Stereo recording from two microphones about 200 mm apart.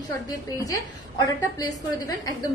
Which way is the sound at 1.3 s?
20° left (ahead or behind).